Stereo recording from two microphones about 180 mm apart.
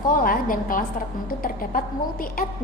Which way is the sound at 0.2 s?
50° left (ahead or behind).